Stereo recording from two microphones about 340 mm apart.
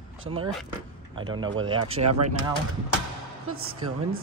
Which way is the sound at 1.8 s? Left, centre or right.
Right.